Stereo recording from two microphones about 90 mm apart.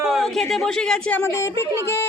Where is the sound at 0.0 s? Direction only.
Centre (ahead or behind).